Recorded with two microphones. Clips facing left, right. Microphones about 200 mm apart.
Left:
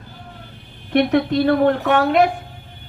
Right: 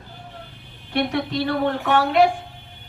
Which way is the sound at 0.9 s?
55° left (ahead or behind).